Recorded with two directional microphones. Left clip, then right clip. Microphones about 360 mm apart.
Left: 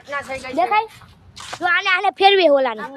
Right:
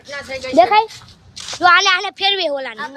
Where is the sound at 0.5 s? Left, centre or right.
Right; by 2.1 s centre.